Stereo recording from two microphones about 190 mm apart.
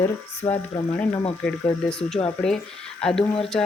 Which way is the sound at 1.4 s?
5° left (ahead or behind).